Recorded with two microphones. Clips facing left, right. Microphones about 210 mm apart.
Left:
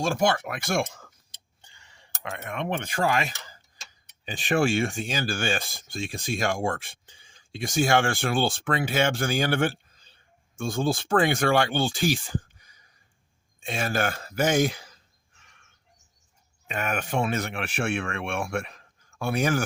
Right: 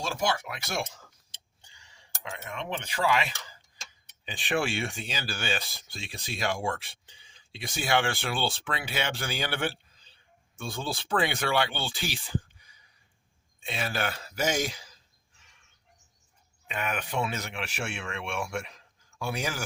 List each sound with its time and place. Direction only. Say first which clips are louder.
0.0 s speech: left 6 dB; 50° left (ahead or behind)
15.4 s bird: left 3 dB; 55° left (ahead or behind)
16.6 s speech: left 4 dB; 45° left (ahead or behind)